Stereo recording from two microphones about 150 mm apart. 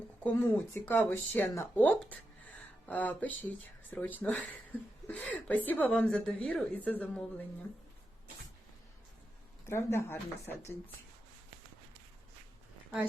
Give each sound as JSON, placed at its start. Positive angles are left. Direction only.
{"t": 0.2, "sound": "a woman's voice", "side_deg": 10}
{"t": 9.6, "sound": "a woman's voice", "side_deg": 15}